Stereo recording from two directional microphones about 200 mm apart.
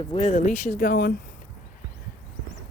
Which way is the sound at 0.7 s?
45° left (ahead or behind).